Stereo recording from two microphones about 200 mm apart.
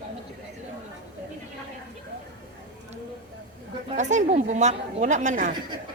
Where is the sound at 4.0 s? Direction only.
35° right (ahead or behind).